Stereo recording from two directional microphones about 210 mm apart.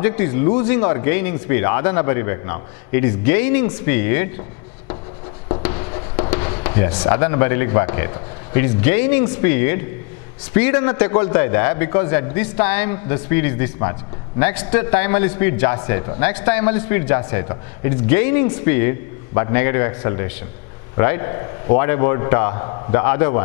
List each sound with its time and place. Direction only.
0.0 s speech: 10° left (ahead or behind)
5.6 s writing: 20° left (ahead or behind)
6.6 s a sound: 15° left (ahead or behind)
7.0 s a man's voice: 15° left (ahead or behind)